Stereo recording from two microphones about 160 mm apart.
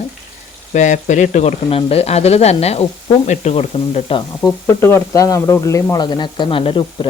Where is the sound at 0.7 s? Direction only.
50° left (ahead or behind).